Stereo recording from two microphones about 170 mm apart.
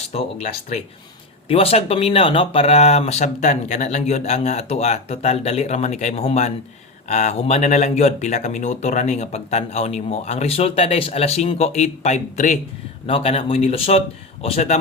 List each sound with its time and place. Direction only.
0.1 s speech: 35° left (ahead or behind)
13.1 s speech: 35° left (ahead or behind)